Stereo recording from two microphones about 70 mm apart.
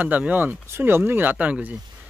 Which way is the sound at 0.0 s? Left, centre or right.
Right.